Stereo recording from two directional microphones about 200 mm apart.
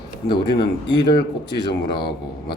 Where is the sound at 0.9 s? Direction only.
20° left (ahead or behind).